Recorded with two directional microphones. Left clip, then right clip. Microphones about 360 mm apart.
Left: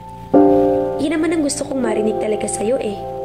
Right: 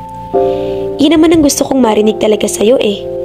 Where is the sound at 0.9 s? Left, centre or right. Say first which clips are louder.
Right 10 dB; right.